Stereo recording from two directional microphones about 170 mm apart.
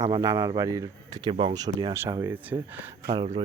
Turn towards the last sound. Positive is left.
turn(degrees=-35)  # may be behind; listen again after turning